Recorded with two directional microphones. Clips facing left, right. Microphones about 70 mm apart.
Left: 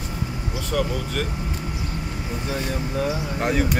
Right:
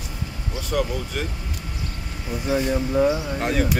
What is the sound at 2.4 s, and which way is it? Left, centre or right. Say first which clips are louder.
Speech: right 7 dB; centre.